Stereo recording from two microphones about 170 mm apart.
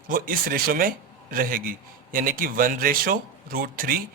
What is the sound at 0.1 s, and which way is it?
Speech, 60° right (ahead or behind).